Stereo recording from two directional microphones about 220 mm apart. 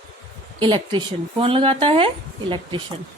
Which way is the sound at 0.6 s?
20° right (ahead or behind).